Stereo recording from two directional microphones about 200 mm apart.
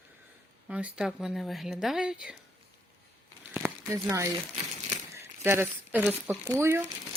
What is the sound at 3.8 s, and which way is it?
Speech, 15° right (ahead or behind).